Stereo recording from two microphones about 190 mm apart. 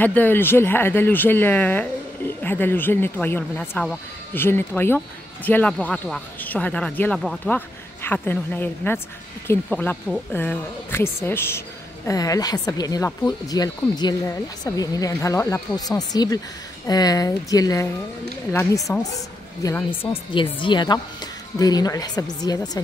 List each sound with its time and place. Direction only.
0.0 s speech: 10° left (ahead or behind)
20.1 s speech: 25° left (ahead or behind)